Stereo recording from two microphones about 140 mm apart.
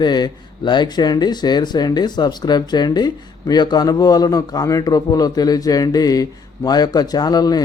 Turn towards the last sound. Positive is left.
turn(degrees=30)  # may be behind; listen again after turning